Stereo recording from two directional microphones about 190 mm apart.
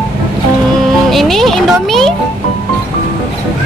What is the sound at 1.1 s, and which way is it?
Speech, centre (ahead or behind).